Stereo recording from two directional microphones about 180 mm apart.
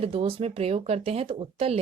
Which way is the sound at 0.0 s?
30° right (ahead or behind).